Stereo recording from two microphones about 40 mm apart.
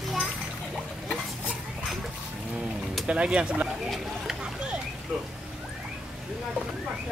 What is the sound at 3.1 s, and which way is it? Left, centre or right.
Speech, right.